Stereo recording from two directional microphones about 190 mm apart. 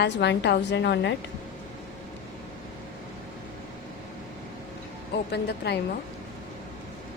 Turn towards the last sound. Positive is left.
turn(degrees=60)  # may be behind; listen again after turning